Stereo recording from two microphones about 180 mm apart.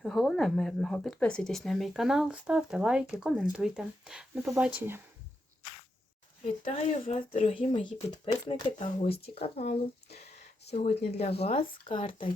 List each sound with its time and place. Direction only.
0.0 s speech: centre (ahead or behind)
6.4 s speech: 40° left (ahead or behind)
7.3 s speech: 35° left (ahead or behind)